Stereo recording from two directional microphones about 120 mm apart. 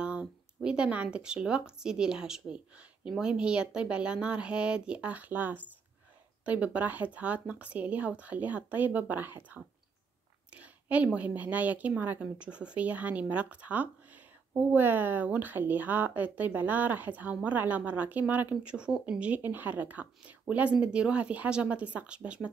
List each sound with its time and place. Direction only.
0.0 s a woman's voice: 10° right (ahead or behind)
10.5 s a woman's voice: 10° right (ahead or behind)